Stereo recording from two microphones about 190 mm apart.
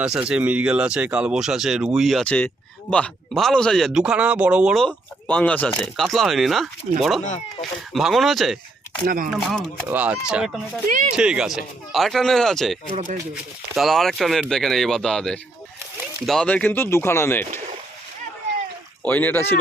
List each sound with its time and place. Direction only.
0.0 s speech: 5° right (ahead or behind)
6.9 s speech: 40° right (ahead or behind)
7.6 s speech: centre (ahead or behind)
9.0 s speech: 45° right (ahead or behind)
9.3 s speech: centre (ahead or behind)
10.8 s speech: 45° right (ahead or behind)
11.2 s speech: 5° right (ahead or behind); by 17.4 s 10° left (ahead or behind)
19.0 s speech: 10° left (ahead or behind)